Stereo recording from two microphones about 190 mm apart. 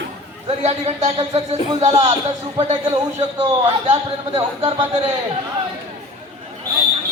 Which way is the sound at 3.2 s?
30° right (ahead or behind).